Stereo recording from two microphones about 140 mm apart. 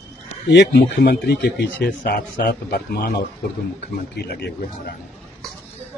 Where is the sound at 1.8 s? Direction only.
90° left.